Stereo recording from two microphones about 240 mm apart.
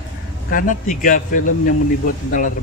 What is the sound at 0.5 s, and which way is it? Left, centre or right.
A man's voice, left.